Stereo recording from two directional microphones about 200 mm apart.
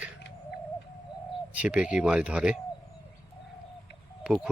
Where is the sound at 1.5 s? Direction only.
5° right (ahead or behind).